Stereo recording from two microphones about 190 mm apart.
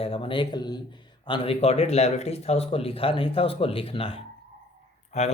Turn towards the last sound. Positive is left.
turn(degrees=35)  # may be behind; listen again after turning